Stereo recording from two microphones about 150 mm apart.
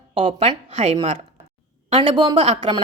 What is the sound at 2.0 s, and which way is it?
Speech, 30° right (ahead or behind).